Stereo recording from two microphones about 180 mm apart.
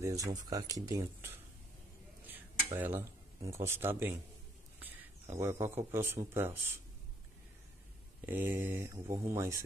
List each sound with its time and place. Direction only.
0.0 s speech: 20° right (ahead or behind)
4.7 s a sound: 10° right (ahead or behind)
5.9 s speech: 15° right (ahead or behind)
8.3 s speech: 10° right (ahead or behind)